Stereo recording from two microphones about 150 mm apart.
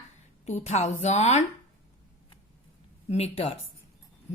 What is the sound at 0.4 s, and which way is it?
A woman's voice, 50° left (ahead or behind).